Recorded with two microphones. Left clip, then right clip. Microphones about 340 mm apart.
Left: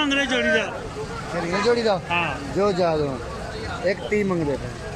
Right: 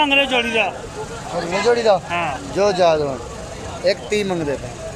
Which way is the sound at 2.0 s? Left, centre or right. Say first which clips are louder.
Right 2 dB; centre.